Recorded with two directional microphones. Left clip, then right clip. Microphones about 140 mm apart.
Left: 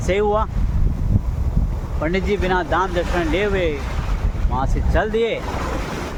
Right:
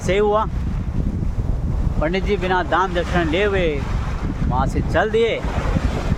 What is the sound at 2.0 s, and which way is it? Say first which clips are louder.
Speech: even; 15° right (ahead or behind).